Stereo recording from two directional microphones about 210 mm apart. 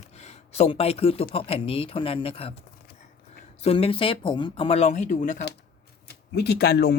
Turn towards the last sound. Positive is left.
turn(degrees=50)  # may be behind; listen again after turning